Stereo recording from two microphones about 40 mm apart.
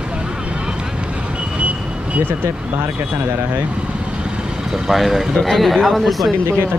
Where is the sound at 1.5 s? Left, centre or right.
Right.